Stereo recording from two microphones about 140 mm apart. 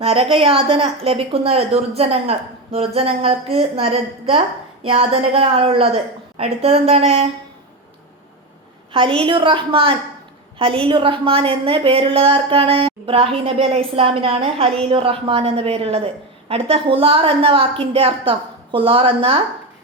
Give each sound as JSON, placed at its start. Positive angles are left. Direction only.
{"t": 0.0, "sound": "a woman's voice", "side_deg": -45}
{"t": 8.9, "sound": "a woman's voice", "side_deg": -40}